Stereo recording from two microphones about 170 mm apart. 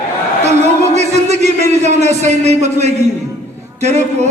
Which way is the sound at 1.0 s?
40° right (ahead or behind).